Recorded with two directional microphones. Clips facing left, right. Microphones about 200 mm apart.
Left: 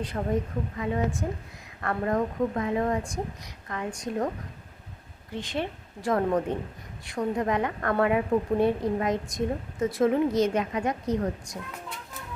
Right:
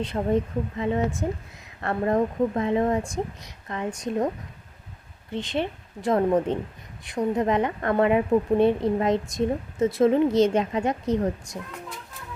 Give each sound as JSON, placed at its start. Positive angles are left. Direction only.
{"t": 0.1, "sound": "a woman's voice", "side_deg": -25}
{"t": 5.3, "sound": "a woman's voice", "side_deg": -25}